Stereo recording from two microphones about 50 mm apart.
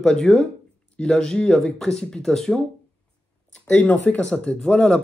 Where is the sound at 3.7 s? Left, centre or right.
Left.